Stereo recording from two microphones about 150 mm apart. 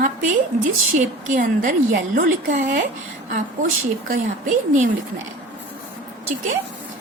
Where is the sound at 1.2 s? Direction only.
60° right (ahead or behind).